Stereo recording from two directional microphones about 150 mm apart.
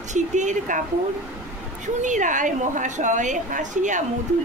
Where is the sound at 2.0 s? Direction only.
55° right (ahead or behind).